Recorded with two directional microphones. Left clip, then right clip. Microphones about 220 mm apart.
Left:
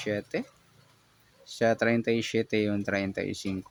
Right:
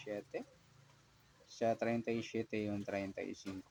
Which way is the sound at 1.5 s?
40° left (ahead or behind).